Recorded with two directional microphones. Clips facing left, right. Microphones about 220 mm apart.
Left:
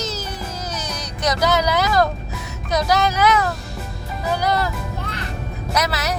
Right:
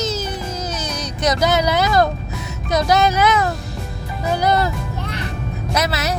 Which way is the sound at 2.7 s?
25° right (ahead or behind).